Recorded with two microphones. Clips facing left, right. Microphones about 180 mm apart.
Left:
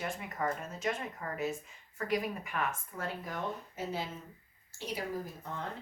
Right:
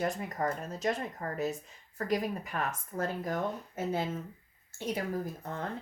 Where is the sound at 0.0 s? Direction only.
40° right (ahead or behind).